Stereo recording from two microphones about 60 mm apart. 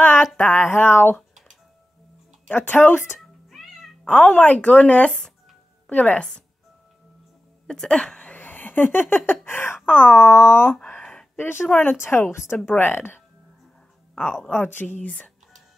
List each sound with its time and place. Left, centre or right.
0.4 s speech: left
2.5 s speech: left
3.2 s cat: centre
4.1 s a woman's voice: centre
7.6 s a sound: centre
8.4 s a sound: left
9.8 s speech: left
10.9 s a sound: centre
11.3 s speech: left
12.7 s speech: left
14.5 s a woman's voice: left